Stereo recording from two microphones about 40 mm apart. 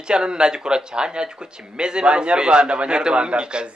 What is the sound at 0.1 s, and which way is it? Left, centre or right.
Speech, right.